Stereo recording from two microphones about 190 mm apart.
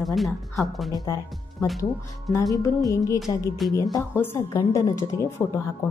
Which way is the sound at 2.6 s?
15° left (ahead or behind).